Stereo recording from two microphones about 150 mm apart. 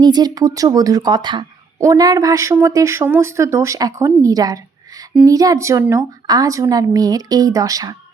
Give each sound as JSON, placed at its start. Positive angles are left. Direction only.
{"t": 0.0, "sound": "a woman's voice", "side_deg": -25}